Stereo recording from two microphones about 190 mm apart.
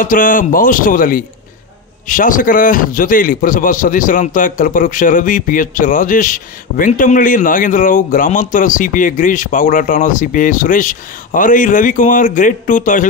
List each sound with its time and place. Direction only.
0.0 s a man's voice: 45° left (ahead or behind)